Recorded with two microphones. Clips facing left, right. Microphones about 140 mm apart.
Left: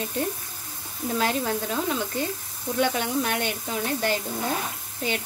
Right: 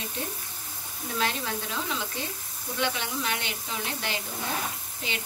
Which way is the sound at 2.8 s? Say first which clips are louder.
Left 6 dB; 45° left (ahead or behind).